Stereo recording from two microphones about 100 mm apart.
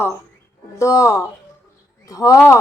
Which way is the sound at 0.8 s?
30° left (ahead or behind).